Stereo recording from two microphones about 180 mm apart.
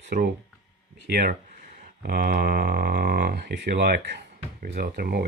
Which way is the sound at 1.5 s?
50° right (ahead or behind).